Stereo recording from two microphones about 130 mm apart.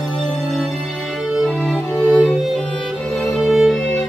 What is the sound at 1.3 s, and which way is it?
Music, 5° left (ahead or behind).